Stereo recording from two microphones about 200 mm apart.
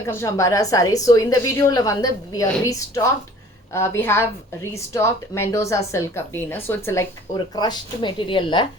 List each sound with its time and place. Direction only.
0.1 s a woman's voice: 15° left (ahead or behind)